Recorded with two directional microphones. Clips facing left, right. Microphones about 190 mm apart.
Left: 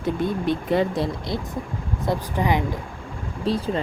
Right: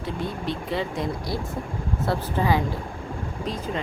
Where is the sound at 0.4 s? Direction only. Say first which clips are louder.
Left 7 dB; 50° left (ahead or behind).